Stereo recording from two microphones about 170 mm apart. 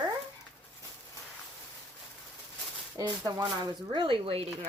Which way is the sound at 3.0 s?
25° right (ahead or behind).